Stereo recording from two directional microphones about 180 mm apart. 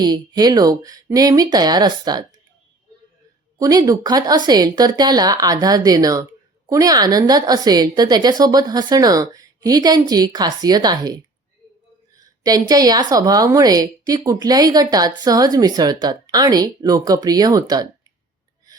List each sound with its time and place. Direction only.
0.0 s a woman's voice: 20° right (ahead or behind)
3.6 s a woman's voice: 20° right (ahead or behind)
12.2 s a woman's voice: 20° right (ahead or behind)